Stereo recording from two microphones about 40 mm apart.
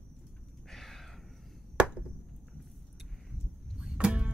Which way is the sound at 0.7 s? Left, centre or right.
Centre.